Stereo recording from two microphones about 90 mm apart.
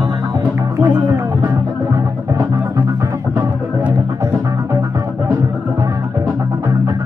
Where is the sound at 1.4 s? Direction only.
35° right (ahead or behind).